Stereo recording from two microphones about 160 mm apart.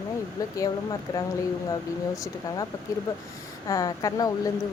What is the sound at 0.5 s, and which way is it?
Speech, 25° left (ahead or behind).